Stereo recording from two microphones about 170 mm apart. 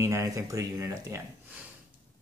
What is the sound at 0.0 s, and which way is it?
Speech, 20° right (ahead or behind).